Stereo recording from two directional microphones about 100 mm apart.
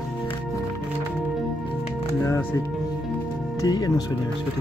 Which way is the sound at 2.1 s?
30° left (ahead or behind).